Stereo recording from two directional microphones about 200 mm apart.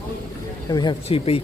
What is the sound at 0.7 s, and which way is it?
Speech, 20° left (ahead or behind).